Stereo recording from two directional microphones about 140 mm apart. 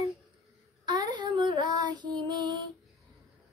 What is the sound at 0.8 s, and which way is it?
Child singing, 30° right (ahead or behind).